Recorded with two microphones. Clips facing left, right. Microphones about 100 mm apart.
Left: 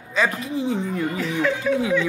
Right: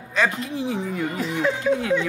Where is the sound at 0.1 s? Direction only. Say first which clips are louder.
Left 1 dB; centre (ahead or behind).